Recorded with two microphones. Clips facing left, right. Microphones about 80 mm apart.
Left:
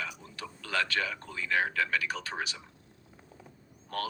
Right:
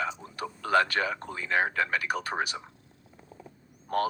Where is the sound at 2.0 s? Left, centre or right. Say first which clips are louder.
Right 5 dB; right.